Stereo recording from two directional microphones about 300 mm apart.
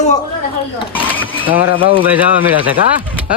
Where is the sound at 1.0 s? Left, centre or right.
Centre.